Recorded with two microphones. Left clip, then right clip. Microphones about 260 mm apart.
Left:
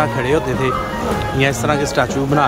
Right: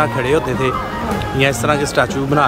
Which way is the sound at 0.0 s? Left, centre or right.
Centre.